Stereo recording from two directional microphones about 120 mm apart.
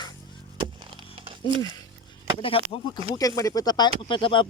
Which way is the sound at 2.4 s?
50° left (ahead or behind).